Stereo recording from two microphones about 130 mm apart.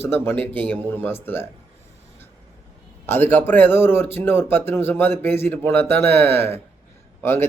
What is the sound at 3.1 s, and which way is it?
Speech, 15° left (ahead or behind).